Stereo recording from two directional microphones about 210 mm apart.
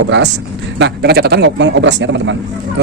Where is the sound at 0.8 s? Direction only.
50° right (ahead or behind).